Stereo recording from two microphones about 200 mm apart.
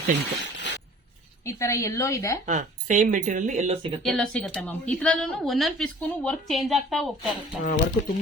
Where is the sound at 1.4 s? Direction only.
15° left (ahead or behind).